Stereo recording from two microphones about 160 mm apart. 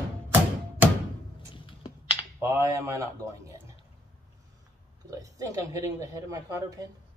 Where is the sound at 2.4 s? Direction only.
20° right (ahead or behind).